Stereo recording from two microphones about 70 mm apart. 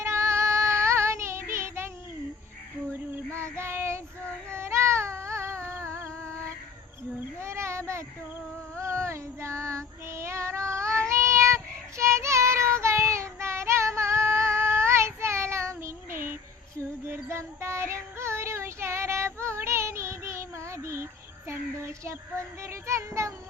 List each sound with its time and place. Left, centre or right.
0.0 s child singing: right
2.9 s child singing: right
4.5 s a sound: right
8.8 s child singing: right